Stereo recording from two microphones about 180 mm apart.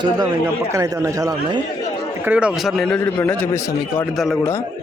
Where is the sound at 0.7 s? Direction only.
15° right (ahead or behind).